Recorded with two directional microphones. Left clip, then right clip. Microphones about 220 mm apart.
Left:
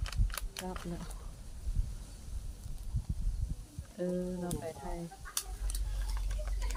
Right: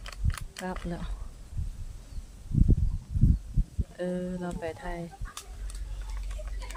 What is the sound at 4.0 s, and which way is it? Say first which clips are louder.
Speech: right 3 dB; 20° right (ahead or behind).